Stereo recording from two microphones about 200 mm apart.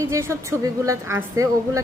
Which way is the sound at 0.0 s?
15° right (ahead or behind).